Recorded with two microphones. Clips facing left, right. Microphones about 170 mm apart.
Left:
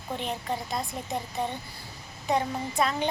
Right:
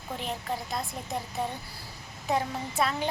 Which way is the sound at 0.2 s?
Centre (ahead or behind).